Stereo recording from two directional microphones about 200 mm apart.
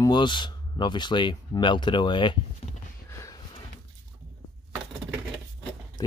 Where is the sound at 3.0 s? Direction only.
15° left (ahead or behind).